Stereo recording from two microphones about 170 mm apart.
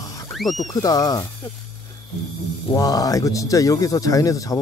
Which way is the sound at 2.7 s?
20° left (ahead or behind).